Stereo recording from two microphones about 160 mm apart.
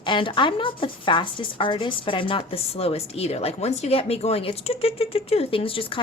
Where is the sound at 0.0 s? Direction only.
30° left (ahead or behind).